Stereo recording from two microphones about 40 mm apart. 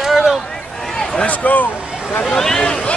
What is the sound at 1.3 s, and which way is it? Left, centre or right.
Speech, left.